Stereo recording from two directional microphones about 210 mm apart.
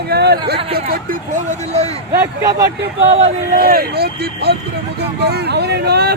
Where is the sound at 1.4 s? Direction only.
30° right (ahead or behind).